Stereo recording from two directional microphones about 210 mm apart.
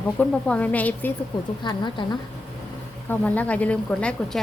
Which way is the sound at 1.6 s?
20° left (ahead or behind).